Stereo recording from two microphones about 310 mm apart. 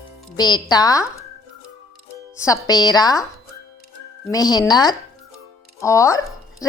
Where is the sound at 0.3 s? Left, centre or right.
Centre.